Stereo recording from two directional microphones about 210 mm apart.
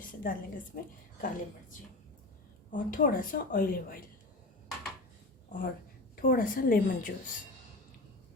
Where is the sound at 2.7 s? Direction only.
40° left (ahead or behind).